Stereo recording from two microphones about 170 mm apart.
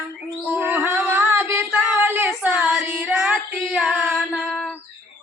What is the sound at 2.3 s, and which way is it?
Female singing, 5° right (ahead or behind).